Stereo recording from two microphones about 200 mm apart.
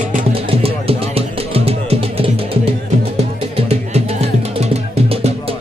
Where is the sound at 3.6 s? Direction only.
30° right (ahead or behind).